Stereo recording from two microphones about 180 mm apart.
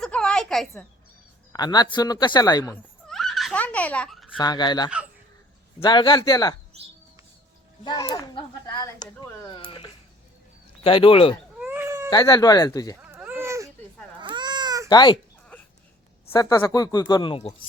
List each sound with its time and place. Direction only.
0.0 s a sound: 5° left (ahead or behind)
1.5 s speech: 20° left (ahead or behind)
3.1 s giggle: centre (ahead or behind)
4.4 s speech: 25° left (ahead or behind)
7.9 s speech: 20° left (ahead or behind)
11.6 s baby cry: 10° right (ahead or behind)
12.1 s speech: 20° left (ahead or behind)
13.0 s baby cry: 10° right (ahead or behind)
14.2 s baby cry: 25° right (ahead or behind)
14.8 s speech: 25° left (ahead or behind)
16.3 s speech: 15° left (ahead or behind)